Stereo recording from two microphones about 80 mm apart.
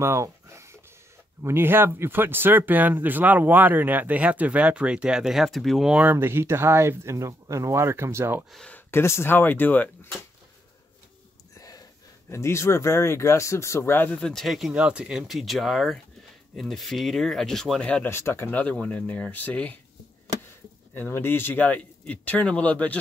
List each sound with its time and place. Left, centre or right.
0.0 s a sound: right
1.4 s speech: right; by 5.9 s centre
6.1 s speech: right
8.6 s speech: left
11.5 s wheeze: left
12.3 s speech: left
14.1 s speech: centre
14.7 s speech: centre
18.0 s speech: left
18.5 s speech: centre
20.9 s speech: left